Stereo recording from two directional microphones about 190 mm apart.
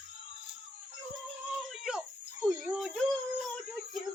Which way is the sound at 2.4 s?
Centre (ahead or behind).